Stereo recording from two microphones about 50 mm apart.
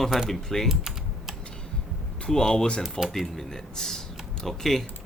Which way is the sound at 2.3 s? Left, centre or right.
Centre.